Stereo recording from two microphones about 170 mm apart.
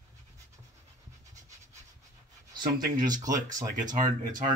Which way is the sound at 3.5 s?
20° right (ahead or behind).